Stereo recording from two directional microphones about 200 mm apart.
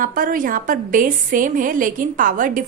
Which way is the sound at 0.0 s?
45° right (ahead or behind).